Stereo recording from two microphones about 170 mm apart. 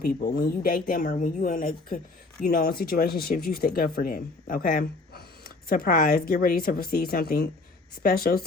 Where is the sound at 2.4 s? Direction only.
65° left (ahead or behind).